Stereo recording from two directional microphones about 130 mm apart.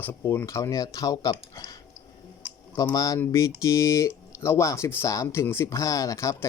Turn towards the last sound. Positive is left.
turn(degrees=25)  # may be behind; listen again after turning